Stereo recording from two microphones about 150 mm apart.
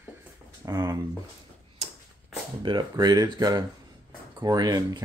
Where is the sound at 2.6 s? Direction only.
30° right (ahead or behind).